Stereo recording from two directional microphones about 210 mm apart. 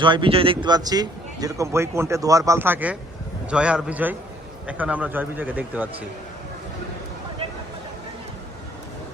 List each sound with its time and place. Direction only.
0.0 s a man's voice: 25° right (ahead or behind); by 5.9 s 10° right (ahead or behind)